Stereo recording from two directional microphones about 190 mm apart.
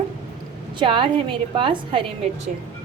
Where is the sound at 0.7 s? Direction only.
25° right (ahead or behind).